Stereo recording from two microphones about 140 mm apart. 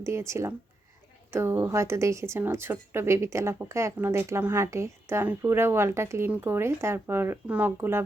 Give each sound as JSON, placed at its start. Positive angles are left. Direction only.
{"t": 0.0, "sound": "a woman's voice", "side_deg": -20}